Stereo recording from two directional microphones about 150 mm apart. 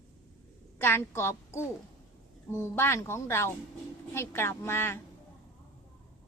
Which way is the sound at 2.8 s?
15° left (ahead or behind).